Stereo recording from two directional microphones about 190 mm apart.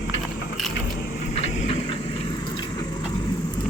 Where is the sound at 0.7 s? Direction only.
55° left (ahead or behind); by 3.2 s 20° left (ahead or behind).